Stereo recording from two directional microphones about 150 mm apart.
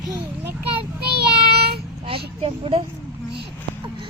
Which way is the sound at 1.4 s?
35° right (ahead or behind).